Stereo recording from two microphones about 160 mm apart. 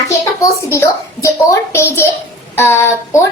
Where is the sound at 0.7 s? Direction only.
20° left (ahead or behind).